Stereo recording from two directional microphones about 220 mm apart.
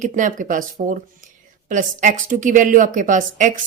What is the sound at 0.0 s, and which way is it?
Speech, 35° right (ahead or behind).